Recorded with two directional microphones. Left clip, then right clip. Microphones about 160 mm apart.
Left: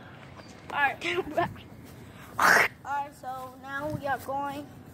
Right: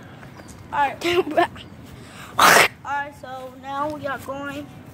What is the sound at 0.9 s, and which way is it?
Speech, 45° right (ahead or behind).